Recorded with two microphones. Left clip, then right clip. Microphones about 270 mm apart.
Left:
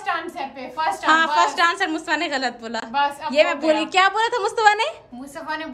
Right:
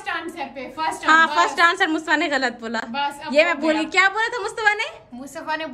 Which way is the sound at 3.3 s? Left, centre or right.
Centre.